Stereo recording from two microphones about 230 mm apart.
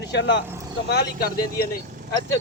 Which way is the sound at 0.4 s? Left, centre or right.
Centre.